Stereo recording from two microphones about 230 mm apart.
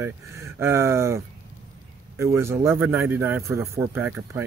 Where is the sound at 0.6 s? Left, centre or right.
Centre.